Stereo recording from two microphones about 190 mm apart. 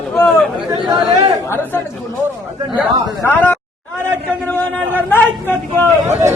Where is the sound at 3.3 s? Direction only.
10° left (ahead or behind).